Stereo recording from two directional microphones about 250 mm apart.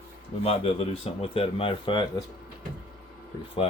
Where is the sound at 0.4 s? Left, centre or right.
Left.